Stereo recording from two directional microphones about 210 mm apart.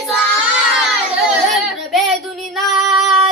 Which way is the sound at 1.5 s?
Centre (ahead or behind).